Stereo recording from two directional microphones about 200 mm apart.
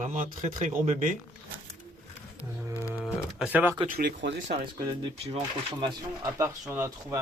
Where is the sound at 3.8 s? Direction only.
45° right (ahead or behind).